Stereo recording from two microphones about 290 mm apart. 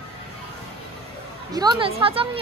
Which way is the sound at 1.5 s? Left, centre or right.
Centre.